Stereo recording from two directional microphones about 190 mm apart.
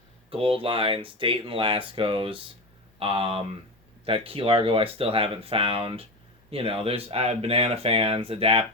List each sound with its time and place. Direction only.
0.3 s speech: 30° right (ahead or behind)